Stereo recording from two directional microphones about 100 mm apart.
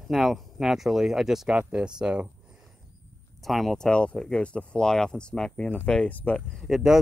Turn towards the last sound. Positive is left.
turn(degrees=-5)  # may be behind; listen again after turning